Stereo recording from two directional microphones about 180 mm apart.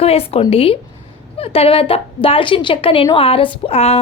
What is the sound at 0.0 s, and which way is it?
A woman's voice, 35° left (ahead or behind).